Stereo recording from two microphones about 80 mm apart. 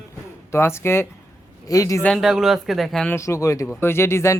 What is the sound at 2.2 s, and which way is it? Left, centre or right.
Speech, centre.